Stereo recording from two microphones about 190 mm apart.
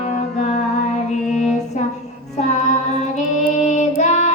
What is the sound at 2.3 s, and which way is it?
Child singing, 40° left (ahead or behind).